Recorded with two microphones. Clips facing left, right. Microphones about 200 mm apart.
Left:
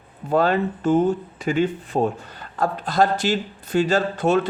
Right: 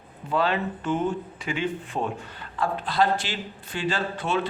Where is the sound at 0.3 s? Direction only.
45° left (ahead or behind).